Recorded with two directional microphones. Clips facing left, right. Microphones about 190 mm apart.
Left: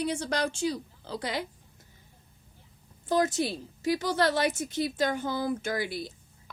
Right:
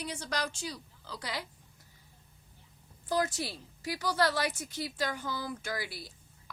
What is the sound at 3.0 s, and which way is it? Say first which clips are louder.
Speech: left 6 dB; 25° left (ahead or behind).